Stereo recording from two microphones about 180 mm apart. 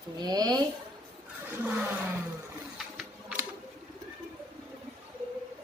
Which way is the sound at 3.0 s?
5° right (ahead or behind).